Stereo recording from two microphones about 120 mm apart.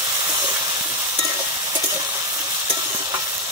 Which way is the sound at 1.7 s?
30° right (ahead or behind).